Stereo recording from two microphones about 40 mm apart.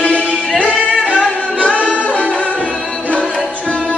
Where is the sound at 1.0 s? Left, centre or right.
Right.